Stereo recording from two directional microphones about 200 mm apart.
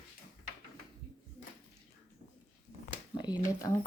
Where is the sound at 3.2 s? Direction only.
20° left (ahead or behind).